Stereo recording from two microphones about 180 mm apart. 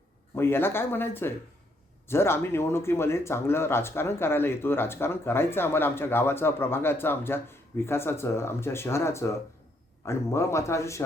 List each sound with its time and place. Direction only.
0.3 s speech: 10° left (ahead or behind)